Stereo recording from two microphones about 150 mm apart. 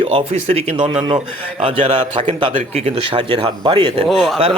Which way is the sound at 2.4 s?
40° right (ahead or behind).